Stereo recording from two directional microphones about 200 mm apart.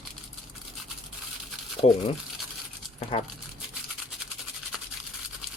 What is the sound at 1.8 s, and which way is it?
Speech, 30° left (ahead or behind).